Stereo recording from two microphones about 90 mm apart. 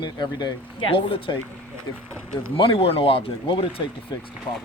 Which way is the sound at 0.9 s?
75° left (ahead or behind).